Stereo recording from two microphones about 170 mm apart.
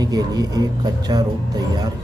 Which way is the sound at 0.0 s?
20° right (ahead or behind).